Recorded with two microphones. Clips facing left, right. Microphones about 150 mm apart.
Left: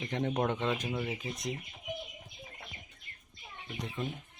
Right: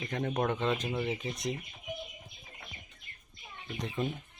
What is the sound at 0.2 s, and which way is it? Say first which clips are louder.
Speech: even; 15° left (ahead or behind).